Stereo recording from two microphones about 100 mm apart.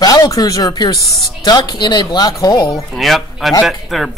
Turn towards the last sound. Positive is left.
turn(degrees=0)  # may be behind; listen again after turning